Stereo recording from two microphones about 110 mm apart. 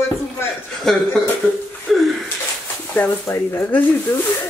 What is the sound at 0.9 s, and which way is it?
Speech, 5° left (ahead or behind).